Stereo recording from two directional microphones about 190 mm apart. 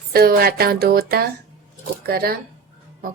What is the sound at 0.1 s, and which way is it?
Speech, 55° right (ahead or behind).